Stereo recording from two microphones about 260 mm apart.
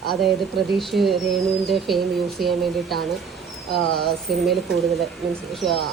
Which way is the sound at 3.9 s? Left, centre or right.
Right.